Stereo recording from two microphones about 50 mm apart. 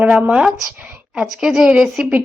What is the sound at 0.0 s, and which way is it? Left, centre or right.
A woman's voice, right.